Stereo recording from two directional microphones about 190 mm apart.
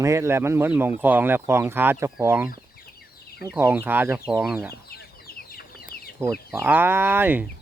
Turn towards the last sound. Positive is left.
turn(degrees=-10)  # may be behind; listen again after turning